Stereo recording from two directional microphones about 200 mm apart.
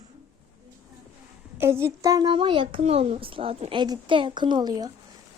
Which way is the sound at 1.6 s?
15° right (ahead or behind).